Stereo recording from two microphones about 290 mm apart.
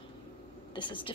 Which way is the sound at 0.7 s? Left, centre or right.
Centre.